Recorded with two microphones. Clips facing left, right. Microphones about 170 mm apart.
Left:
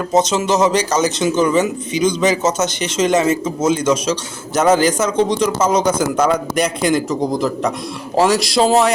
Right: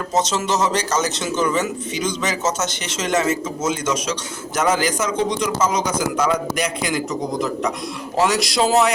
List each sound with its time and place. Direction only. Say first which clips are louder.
0.1 s a man's voice: left 5 dB; 10° left (ahead or behind)
3.0 s a man's voice: left 5 dB; 25° left (ahead or behind)